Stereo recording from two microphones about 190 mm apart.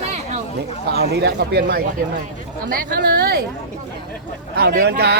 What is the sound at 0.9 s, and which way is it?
Speech, 60° right (ahead or behind).